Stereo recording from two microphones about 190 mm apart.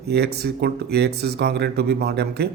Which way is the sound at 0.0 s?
60° right (ahead or behind).